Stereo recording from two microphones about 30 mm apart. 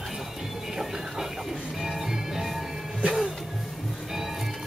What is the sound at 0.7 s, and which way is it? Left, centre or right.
Music, centre.